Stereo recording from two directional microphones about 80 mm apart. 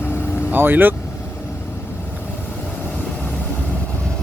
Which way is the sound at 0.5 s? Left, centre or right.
Right.